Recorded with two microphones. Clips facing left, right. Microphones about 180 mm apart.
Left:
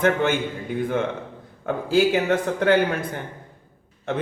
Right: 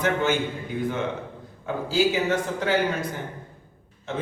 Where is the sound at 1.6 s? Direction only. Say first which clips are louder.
Left 3 dB; 60° left (ahead or behind).